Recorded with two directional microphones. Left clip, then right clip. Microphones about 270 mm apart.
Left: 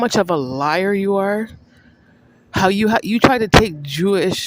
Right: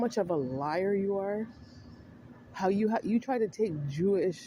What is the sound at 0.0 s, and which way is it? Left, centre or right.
Speech, left.